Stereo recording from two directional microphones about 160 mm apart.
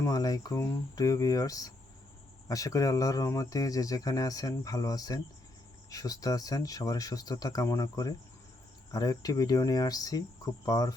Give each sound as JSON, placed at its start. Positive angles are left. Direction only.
{"t": 0.0, "sound": "speech", "side_deg": 20}